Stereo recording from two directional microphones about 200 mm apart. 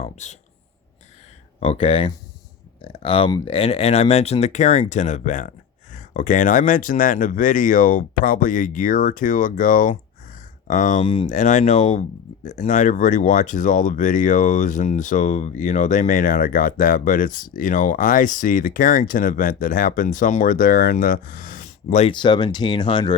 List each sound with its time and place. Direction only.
0.0 s speech: 35° left (ahead or behind)
1.5 s speech: 30° left (ahead or behind)
22.1 s speech: 20° left (ahead or behind)